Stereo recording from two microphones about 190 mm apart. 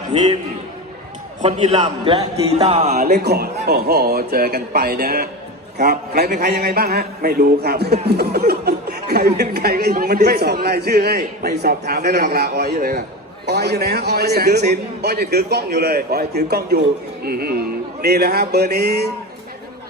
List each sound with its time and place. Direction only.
0.1 s a man's voice: 35° right (ahead or behind)
1.4 s a man's voice: 35° right (ahead or behind)
3.0 s speech: 55° right (ahead or behind)